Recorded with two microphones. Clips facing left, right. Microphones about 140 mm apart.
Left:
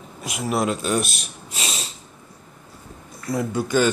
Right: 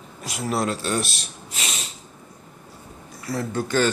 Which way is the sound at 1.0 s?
30° right (ahead or behind).